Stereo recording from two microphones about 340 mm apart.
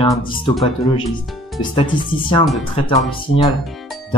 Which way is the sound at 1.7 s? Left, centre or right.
Centre.